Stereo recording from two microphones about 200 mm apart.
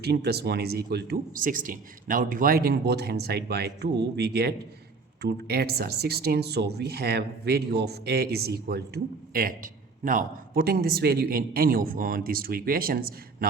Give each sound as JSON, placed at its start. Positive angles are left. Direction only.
{"t": 0.0, "sound": "speech", "side_deg": -55}